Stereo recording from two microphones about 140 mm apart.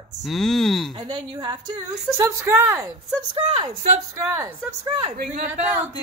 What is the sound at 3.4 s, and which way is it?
Speech, 50° right (ahead or behind).